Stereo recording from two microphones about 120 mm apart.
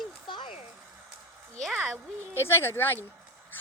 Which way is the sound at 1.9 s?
20° right (ahead or behind).